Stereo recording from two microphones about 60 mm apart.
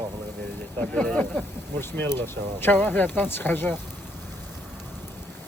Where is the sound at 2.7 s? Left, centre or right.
Left.